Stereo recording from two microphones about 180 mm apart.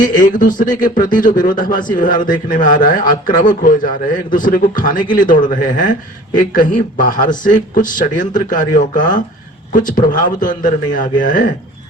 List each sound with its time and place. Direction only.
0.0 s a man's voice: 50° left (ahead or behind)